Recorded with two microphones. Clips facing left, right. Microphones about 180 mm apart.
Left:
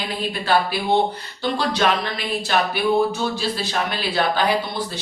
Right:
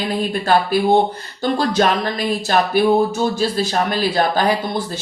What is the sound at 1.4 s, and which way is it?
A woman's voice, 45° right (ahead or behind).